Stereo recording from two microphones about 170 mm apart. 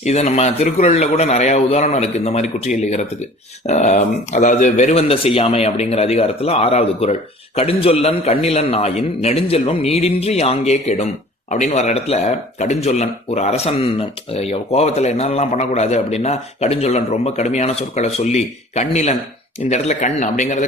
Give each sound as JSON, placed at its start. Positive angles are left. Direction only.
{"t": 0.0, "sound": "a man's voice", "side_deg": 40}